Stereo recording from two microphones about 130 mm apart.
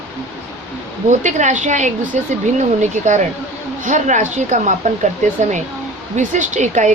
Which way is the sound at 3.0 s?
75° right (ahead or behind).